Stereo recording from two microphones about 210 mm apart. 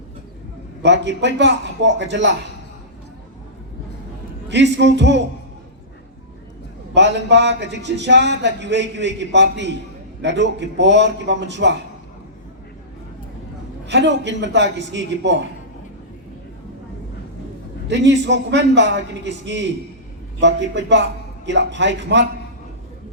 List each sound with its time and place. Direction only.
0.8 s a man's voice: 55° right (ahead or behind)
4.4 s a man's voice: 55° right (ahead or behind)
6.9 s a man's voice: 55° right (ahead or behind)
13.8 s a man's voice: 55° right (ahead or behind)
17.8 s a man's voice: 55° right (ahead or behind)